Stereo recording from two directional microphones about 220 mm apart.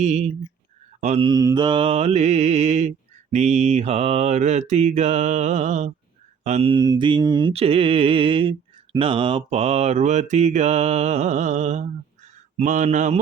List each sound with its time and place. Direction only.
0.0 s mantra: 30° right (ahead or behind)